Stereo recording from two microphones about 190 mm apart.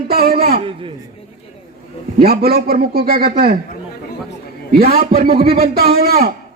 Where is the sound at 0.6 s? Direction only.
30° right (ahead or behind).